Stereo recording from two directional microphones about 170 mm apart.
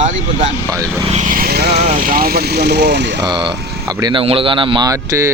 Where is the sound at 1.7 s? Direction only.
40° right (ahead or behind); by 3.3 s 90° right.